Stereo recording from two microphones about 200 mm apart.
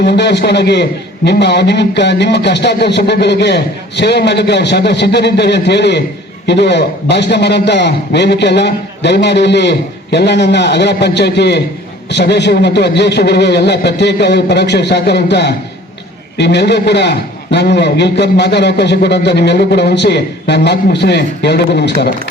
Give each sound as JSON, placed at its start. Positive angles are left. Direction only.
{"t": 0.0, "sound": "a man's voice", "side_deg": 55}